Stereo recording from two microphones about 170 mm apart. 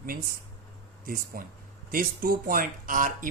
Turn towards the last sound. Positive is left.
turn(degrees=-55)  # may be behind; listen again after turning